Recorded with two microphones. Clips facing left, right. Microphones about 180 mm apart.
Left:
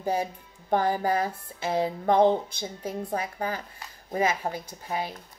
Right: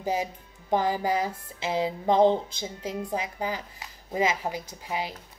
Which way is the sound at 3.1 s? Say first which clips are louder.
Left 1 dB; 15° right (ahead or behind).